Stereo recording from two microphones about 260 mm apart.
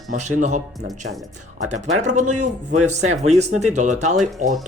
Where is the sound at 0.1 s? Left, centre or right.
Right.